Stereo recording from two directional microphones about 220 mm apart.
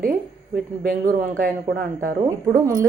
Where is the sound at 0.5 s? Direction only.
40° right (ahead or behind).